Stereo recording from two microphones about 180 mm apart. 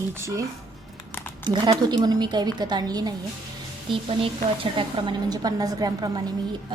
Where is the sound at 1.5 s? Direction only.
25° right (ahead or behind).